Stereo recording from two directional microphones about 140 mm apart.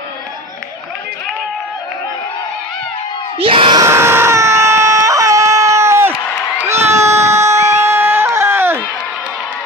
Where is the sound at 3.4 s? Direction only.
40° right (ahead or behind).